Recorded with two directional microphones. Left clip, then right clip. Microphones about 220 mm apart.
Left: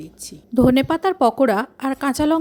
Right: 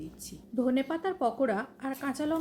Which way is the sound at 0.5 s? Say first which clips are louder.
Left 13 dB; 50° left (ahead or behind).